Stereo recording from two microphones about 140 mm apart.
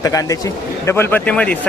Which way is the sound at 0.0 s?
25° left (ahead or behind).